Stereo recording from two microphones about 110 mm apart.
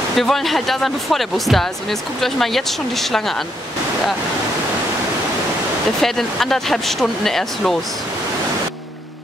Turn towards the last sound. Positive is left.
turn(degrees=5)  # may be behind; listen again after turning